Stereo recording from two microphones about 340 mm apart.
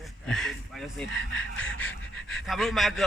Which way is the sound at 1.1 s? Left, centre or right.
Left.